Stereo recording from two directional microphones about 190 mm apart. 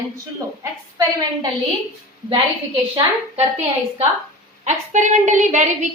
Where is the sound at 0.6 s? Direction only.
20° right (ahead or behind).